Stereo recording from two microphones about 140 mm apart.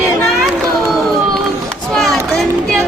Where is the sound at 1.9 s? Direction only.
Centre (ahead or behind).